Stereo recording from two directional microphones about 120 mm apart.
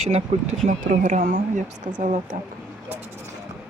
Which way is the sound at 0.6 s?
90° right.